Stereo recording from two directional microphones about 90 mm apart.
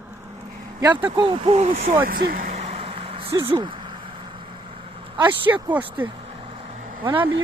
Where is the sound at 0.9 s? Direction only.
65° right (ahead or behind); by 1.7 s 85° right.